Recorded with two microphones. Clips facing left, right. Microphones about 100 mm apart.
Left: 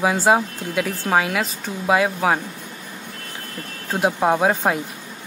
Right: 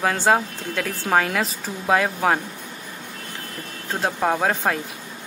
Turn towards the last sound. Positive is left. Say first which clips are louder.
# left 3 dB
turn(degrees=15)  # may be behind; listen again after turning